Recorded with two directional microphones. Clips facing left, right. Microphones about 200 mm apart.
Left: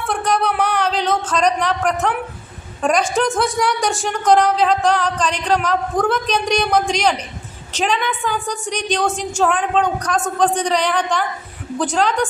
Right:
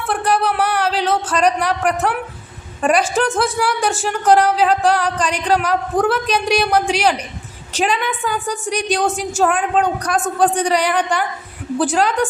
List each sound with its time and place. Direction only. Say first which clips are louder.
0.1 s a woman's voice: right 1 dB; 5° right (ahead or behind)